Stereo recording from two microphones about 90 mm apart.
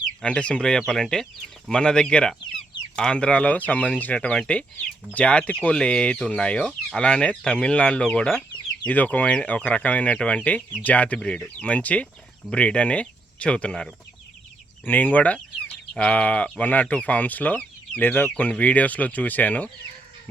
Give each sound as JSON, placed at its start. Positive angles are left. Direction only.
{"t": 0.2, "sound": "speech", "side_deg": 10}